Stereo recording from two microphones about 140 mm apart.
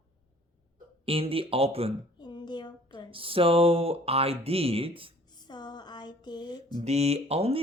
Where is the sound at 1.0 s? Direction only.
40° right (ahead or behind).